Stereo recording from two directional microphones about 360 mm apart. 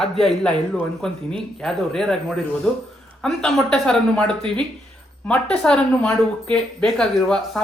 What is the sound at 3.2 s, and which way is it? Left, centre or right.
Speech, centre.